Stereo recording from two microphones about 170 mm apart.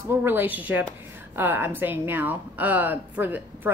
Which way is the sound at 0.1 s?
15° right (ahead or behind).